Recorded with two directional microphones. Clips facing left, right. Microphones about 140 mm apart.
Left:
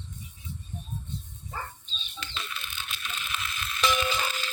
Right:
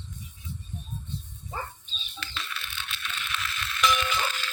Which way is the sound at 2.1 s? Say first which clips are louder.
Even; 25° left (ahead or behind).